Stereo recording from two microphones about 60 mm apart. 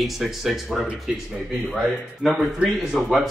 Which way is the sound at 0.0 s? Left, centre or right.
Centre.